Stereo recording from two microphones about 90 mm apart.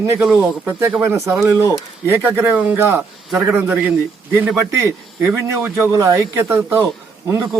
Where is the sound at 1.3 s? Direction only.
5° right (ahead or behind).